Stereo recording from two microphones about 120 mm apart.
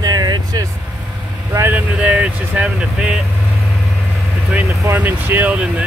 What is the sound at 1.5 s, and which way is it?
Speech, 20° right (ahead or behind).